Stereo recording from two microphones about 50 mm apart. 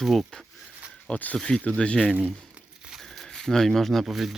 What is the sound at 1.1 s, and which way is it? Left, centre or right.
Speech, left.